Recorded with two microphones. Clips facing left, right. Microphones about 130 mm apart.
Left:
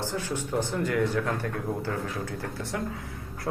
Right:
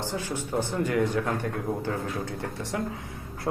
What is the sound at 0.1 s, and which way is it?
Speech, 15° right (ahead or behind).